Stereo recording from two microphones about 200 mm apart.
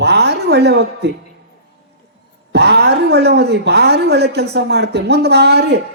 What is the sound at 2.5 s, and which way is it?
A man's voice, 55° right (ahead or behind).